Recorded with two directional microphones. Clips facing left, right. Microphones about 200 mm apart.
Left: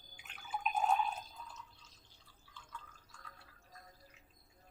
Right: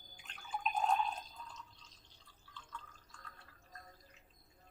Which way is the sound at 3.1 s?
10° left (ahead or behind).